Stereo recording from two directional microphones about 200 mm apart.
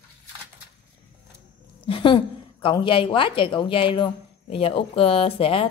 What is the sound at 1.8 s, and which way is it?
Speech, 25° left (ahead or behind).